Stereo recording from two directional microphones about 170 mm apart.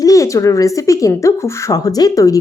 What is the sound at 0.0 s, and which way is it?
A woman's voice, 20° left (ahead or behind).